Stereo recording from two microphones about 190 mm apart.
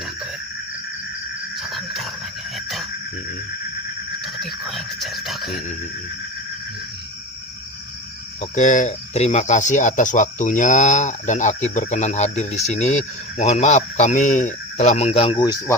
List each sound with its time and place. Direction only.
1.5 s a sound: centre (ahead or behind)
2.6 s cricket: centre (ahead or behind)
4.2 s speech: centre (ahead or behind)
8.4 s speech: 40° left (ahead or behind); by 15.7 s 20° left (ahead or behind)